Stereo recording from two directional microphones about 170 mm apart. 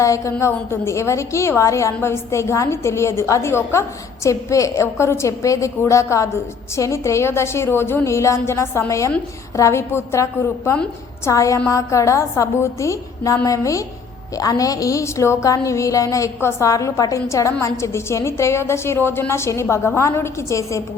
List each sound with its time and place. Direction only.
0.0 s a woman's voice: 20° left (ahead or behind)
11.3 s a woman's voice: 20° left (ahead or behind)